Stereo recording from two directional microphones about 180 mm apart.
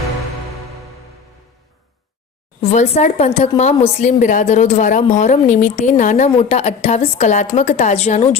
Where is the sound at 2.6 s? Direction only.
40° left (ahead or behind).